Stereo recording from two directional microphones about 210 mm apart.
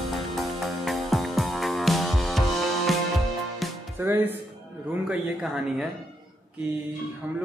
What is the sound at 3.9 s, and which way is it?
Music, 10° right (ahead or behind).